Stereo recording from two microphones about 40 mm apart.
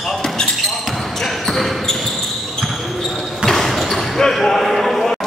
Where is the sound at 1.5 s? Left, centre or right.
Centre.